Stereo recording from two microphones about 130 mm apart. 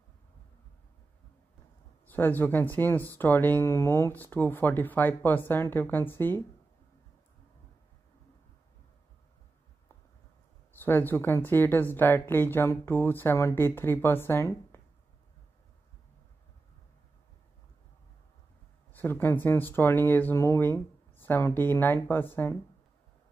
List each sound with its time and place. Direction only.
2.0 s speech: 15° left (ahead or behind)
10.7 s speech: 15° left (ahead or behind)
18.9 s speech: 15° left (ahead or behind)